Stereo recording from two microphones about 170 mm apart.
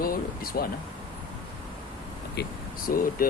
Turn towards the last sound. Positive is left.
turn(degrees=55)  # may be behind; listen again after turning